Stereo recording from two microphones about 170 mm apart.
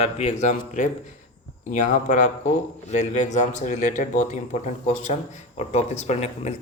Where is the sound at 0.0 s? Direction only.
40° left (ahead or behind).